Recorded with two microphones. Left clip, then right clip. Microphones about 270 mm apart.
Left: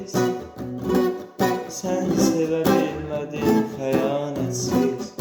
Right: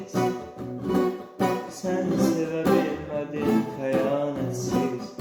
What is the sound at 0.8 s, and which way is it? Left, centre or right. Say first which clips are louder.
Music: left 3 dB; left.